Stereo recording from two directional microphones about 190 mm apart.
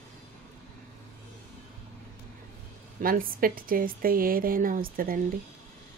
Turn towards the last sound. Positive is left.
turn(degrees=-50)  # may be behind; listen again after turning